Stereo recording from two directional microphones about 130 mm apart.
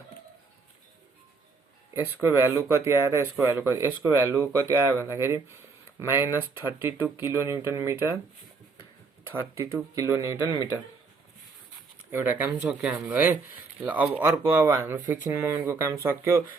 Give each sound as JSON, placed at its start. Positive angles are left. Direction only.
{"t": 1.9, "sound": "speech", "side_deg": -15}
{"t": 9.2, "sound": "speech", "side_deg": -20}
{"t": 12.1, "sound": "speech", "side_deg": -15}